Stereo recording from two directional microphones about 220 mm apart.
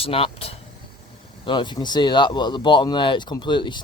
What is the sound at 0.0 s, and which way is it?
Speech, 25° left (ahead or behind).